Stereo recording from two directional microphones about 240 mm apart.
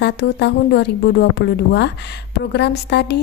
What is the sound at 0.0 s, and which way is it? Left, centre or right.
Speech, left.